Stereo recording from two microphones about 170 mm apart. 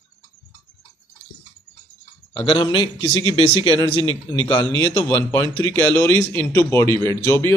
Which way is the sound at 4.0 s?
30° right (ahead or behind).